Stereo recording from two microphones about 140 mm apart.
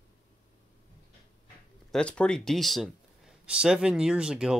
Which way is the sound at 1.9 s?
10° left (ahead or behind).